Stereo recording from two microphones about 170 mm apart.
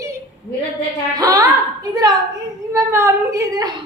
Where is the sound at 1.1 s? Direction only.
20° right (ahead or behind).